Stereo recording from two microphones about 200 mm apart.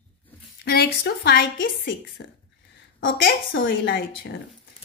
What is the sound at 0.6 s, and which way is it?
A woman's voice, 55° left (ahead or behind).